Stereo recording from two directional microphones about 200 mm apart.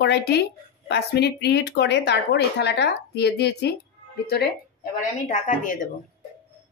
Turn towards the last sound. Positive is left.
turn(degrees=40)  # may be behind; listen again after turning